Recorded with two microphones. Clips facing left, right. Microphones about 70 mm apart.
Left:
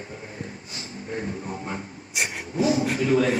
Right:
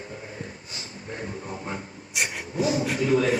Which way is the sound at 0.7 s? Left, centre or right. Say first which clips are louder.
Left 4 dB; left.